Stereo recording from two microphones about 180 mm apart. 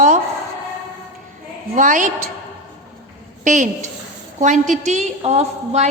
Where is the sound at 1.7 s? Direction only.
45° right (ahead or behind).